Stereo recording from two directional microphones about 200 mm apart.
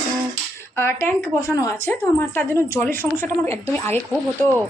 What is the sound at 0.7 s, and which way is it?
A woman's voice, 10° left (ahead or behind).